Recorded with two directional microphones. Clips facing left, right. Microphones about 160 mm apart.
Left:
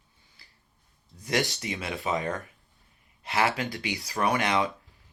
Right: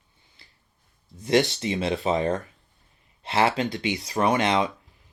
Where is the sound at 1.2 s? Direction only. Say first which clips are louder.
Right 7 dB; 25° right (ahead or behind).